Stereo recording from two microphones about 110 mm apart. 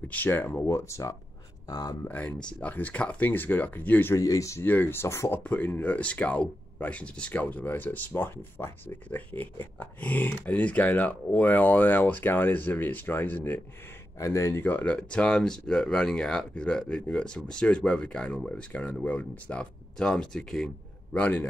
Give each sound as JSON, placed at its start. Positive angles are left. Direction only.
{"t": 0.1, "sound": "speech", "side_deg": 20}
{"t": 2.0, "sound": "speech", "side_deg": 15}
{"t": 4.2, "sound": "speech", "side_deg": 30}
{"t": 5.4, "sound": "speech", "side_deg": 15}
{"t": 14.1, "sound": "speech", "side_deg": 25}